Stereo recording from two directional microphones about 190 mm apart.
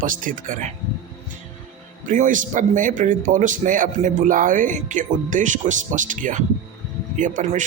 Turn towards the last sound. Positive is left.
turn(degrees=-40)  # may be behind; listen again after turning